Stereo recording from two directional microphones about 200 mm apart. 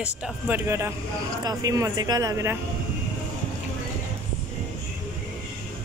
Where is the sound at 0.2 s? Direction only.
10° right (ahead or behind).